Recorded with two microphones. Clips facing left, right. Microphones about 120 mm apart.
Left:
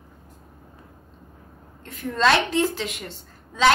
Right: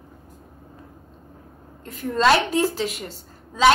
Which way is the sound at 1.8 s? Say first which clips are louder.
Right 2 dB; 5° right (ahead or behind).